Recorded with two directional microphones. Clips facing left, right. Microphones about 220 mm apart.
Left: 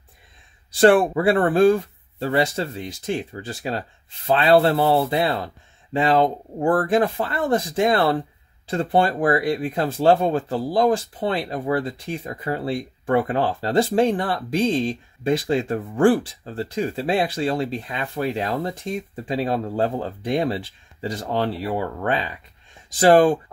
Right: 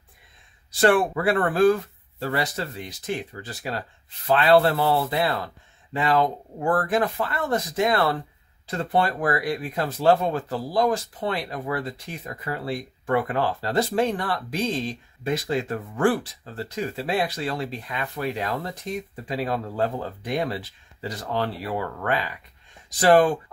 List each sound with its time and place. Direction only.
0.7 s speech: 30° left (ahead or behind)